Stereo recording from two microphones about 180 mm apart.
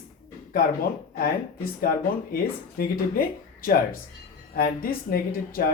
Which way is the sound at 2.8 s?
55° left (ahead or behind).